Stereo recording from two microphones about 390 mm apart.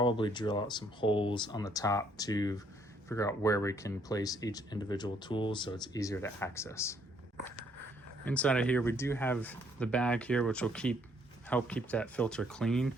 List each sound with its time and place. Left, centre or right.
0.0 s speech: centre
8.2 s speech: centre